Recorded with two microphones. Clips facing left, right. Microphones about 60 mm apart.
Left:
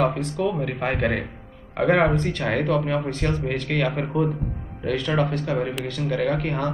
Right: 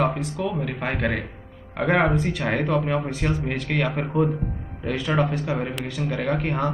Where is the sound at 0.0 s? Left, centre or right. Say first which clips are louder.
Left 2 dB; centre.